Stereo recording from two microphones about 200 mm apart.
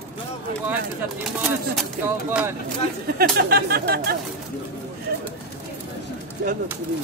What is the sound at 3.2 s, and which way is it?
Speech, 50° right (ahead or behind).